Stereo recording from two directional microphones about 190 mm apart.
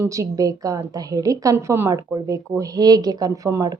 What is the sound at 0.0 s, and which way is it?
A woman's voice, 15° right (ahead or behind).